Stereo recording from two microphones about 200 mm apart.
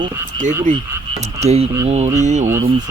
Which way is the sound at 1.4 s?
30° right (ahead or behind).